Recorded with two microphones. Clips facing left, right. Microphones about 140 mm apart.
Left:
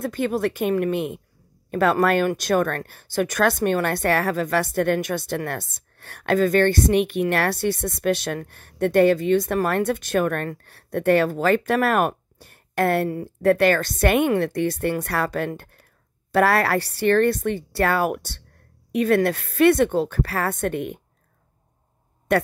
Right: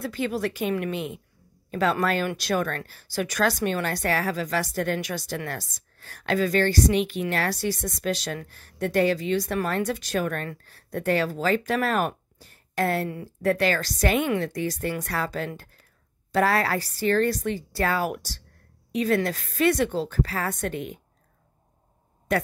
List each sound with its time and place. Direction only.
0.0 s speech: 50° left (ahead or behind)
22.3 s speech: 65° left (ahead or behind)